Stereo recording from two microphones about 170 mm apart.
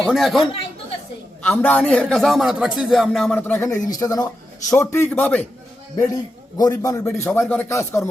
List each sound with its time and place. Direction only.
0.0 s a man's voice: centre (ahead or behind)
1.5 s a man's voice: 10° left (ahead or behind)
6.1 s a man's voice: 20° left (ahead or behind)